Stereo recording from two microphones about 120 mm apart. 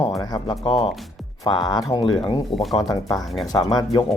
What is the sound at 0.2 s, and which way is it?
Speech, 35° left (ahead or behind).